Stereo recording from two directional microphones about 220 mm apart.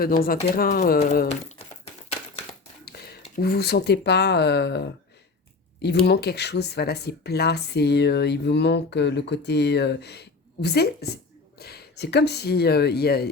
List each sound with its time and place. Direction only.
0.0 s speech: 40° left (ahead or behind)
2.8 s a sound: 45° left (ahead or behind)
3.2 s speech: 40° left (ahead or behind)
6.1 s speech: 50° left (ahead or behind)